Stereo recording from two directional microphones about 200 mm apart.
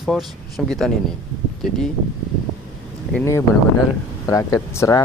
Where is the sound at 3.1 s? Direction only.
15° left (ahead or behind).